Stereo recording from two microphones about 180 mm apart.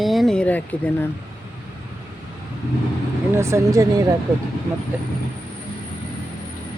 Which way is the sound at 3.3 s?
15° right (ahead or behind).